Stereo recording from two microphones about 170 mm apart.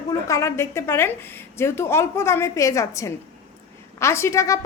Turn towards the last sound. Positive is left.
turn(degrees=20)  # may be behind; listen again after turning